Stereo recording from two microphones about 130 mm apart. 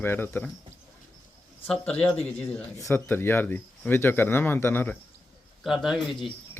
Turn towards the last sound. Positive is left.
turn(degrees=0)  # may be behind; listen again after turning